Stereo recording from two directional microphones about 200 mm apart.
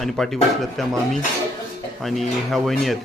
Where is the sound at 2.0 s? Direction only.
Centre (ahead or behind).